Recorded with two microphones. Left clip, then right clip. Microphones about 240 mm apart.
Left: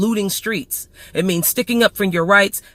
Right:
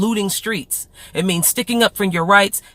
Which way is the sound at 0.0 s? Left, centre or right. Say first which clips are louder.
Even; right.